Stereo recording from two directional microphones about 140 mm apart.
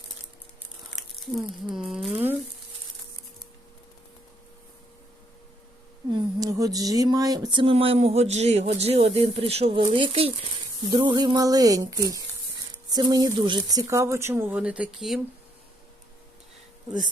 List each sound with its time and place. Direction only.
0.9 s speech: centre (ahead or behind)
6.1 s speech: 30° right (ahead or behind); by 15.2 s centre (ahead or behind)